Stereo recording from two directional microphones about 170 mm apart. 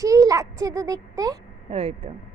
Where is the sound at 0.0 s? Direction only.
20° right (ahead or behind).